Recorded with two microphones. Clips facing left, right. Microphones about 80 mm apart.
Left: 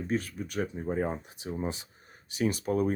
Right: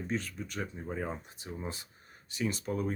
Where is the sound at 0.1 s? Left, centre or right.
Left.